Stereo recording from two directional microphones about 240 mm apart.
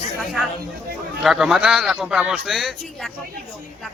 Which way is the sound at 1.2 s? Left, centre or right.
Centre.